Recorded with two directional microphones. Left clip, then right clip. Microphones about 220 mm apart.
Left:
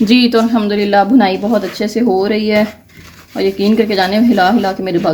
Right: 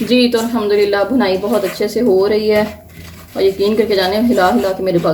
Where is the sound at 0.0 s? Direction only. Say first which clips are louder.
Left 2 dB; 50° left (ahead or behind).